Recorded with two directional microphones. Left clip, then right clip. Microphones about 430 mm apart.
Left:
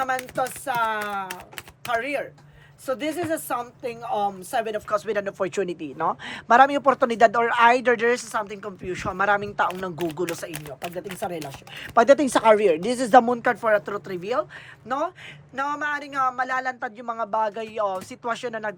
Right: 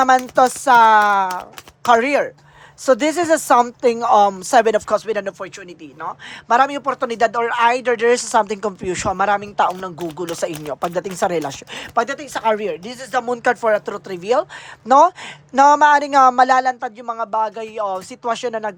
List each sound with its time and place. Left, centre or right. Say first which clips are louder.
0.0 s speech: right 12 dB; centre
11.9 s speech: left 4 dB; centre